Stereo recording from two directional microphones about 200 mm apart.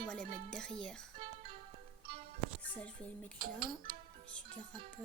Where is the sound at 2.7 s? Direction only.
5° left (ahead or behind).